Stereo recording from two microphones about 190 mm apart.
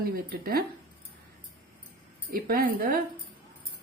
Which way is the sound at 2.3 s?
50° right (ahead or behind).